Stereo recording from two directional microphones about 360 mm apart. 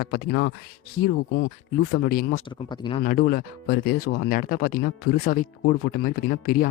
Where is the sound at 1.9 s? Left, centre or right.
Left.